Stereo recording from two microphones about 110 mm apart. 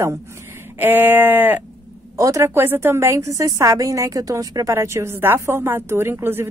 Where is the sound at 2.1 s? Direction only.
30° right (ahead or behind).